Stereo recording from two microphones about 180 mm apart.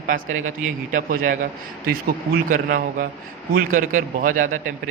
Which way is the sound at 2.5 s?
50° right (ahead or behind).